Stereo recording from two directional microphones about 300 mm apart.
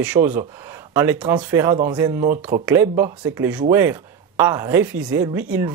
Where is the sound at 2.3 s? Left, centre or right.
Right.